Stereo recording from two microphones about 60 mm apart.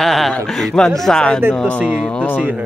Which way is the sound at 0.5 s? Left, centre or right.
Centre.